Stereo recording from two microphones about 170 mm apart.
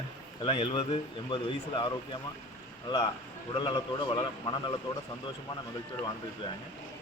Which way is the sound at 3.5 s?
25° left (ahead or behind).